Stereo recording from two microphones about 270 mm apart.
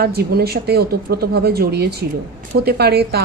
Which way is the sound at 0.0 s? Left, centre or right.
Right.